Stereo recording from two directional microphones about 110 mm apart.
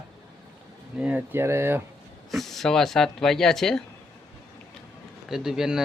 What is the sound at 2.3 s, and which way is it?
Speech, centre (ahead or behind).